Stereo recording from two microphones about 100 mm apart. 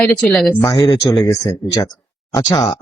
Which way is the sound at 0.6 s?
40° left (ahead or behind).